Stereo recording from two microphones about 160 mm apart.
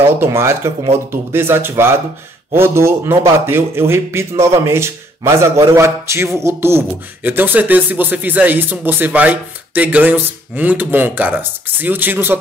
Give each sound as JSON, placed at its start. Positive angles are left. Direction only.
{"t": 0.0, "sound": "a man's voice", "side_deg": -15}